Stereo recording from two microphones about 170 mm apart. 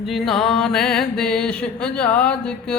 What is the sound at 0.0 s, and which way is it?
Music, centre (ahead or behind).